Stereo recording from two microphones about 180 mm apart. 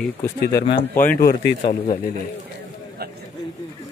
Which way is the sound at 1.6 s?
35° left (ahead or behind).